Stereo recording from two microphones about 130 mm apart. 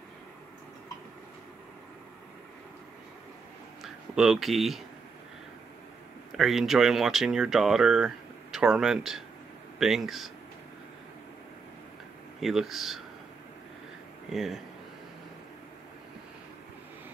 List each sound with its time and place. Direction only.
3.8 s speech: 5° right (ahead or behind)
6.3 s speech: centre (ahead or behind)
12.4 s speech: centre (ahead or behind)
14.3 s speech: centre (ahead or behind)